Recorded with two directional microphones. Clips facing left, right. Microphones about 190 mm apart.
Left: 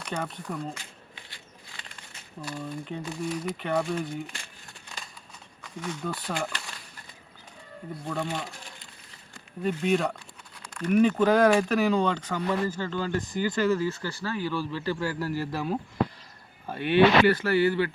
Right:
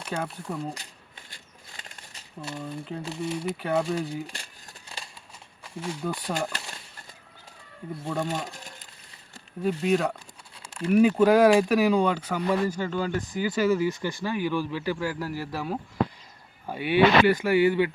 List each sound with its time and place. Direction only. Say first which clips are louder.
0.1 s speech: right 1 dB; 5° right (ahead or behind)
2.6 s speech: even; centre (ahead or behind)
3.2 s speech: right 1 dB; 25° right (ahead or behind)
3.4 s speech: right 3 dB; 5° right (ahead or behind)
5.6 s speech: right 1 dB; 30° right (ahead or behind)
6.0 s speech: right 4 dB; 10° right (ahead or behind)
8.0 s speech: right 2 dB; 10° right (ahead or behind)
9.6 s speech: right 1 dB; centre (ahead or behind)